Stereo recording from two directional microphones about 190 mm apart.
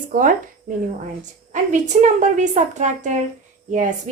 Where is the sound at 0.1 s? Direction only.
45° right (ahead or behind).